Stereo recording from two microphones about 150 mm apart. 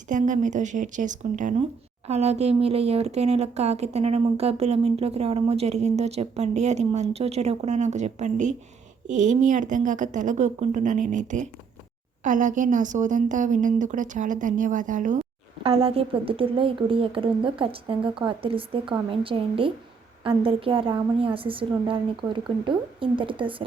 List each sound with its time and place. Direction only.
0.1 s a woman's voice: 55° right (ahead or behind)
2.0 s a woman's voice: 45° right (ahead or behind)
15.6 s a woman's voice: 40° right (ahead or behind)